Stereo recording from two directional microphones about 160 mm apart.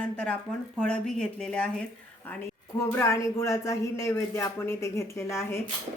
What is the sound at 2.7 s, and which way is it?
Speech, 15° left (ahead or behind).